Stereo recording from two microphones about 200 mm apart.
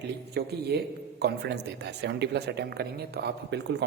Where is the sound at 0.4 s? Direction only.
55° right (ahead or behind).